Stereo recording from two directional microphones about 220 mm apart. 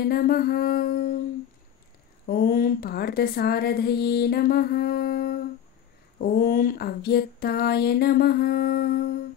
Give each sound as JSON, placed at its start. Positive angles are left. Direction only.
{"t": 0.0, "sound": "speech", "side_deg": 45}
{"t": 2.2, "sound": "speech", "side_deg": 45}